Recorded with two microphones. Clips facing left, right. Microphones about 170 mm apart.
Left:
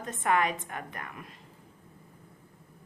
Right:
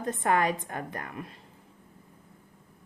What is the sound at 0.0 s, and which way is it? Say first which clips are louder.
A woman's voice: right 2 dB; 35° right (ahead or behind).